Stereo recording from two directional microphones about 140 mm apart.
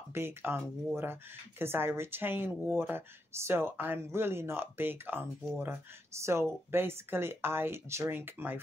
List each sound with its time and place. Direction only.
0.1 s speech: 15° right (ahead or behind)